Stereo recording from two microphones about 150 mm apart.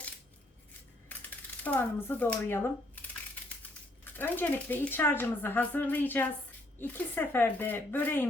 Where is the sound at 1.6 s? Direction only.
10° left (ahead or behind).